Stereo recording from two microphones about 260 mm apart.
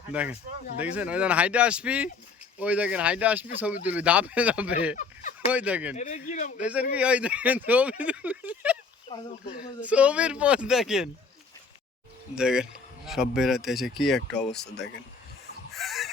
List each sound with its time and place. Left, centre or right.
0.1 s speech: centre
6.0 s speech: left
6.6 s speech: centre
9.1 s speech: centre
9.8 s speech: centre
12.3 s speech: centre
15.7 s a sound: centre